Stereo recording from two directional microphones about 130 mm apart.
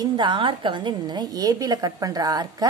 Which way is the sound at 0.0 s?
35° right (ahead or behind).